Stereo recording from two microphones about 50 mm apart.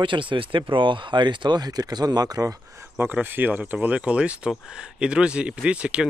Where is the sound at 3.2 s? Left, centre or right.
Right.